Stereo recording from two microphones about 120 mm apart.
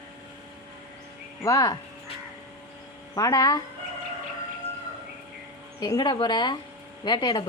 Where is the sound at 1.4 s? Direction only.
30° left (ahead or behind).